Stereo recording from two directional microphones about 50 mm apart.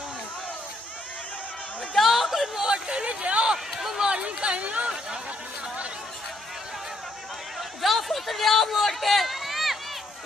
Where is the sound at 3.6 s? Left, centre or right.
Centre.